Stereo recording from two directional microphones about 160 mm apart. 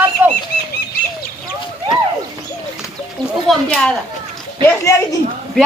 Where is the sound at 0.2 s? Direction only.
10° right (ahead or behind).